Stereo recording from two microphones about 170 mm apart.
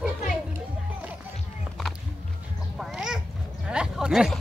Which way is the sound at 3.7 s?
5° right (ahead or behind).